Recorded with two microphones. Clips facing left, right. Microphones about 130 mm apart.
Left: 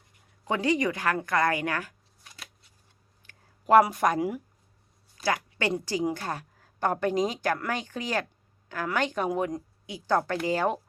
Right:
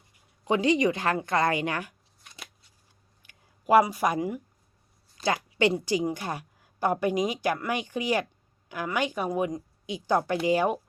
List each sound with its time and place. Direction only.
0.4 s a woman's voice: 20° right (ahead or behind)
3.2 s a sound: 10° right (ahead or behind)
3.9 s a woman's voice: 10° right (ahead or behind)
5.2 s a woman's voice: 20° right (ahead or behind); by 9.6 s centre (ahead or behind)
9.8 s a woman's voice: 20° right (ahead or behind)